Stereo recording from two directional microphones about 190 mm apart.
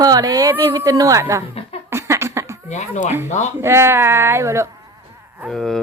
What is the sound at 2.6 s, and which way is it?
Speech, 35° left (ahead or behind).